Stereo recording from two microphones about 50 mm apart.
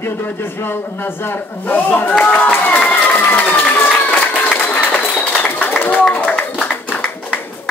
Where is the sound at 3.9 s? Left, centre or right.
Left.